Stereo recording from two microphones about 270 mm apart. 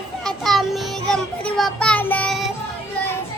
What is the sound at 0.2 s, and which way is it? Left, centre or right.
Child singing, centre.